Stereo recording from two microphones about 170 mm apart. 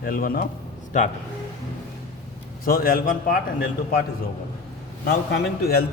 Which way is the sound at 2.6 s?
55° left (ahead or behind).